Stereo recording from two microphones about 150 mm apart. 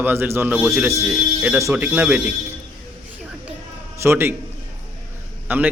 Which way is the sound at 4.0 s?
15° right (ahead or behind).